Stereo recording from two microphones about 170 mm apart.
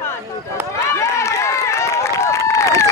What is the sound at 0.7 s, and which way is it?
Run, 15° left (ahead or behind).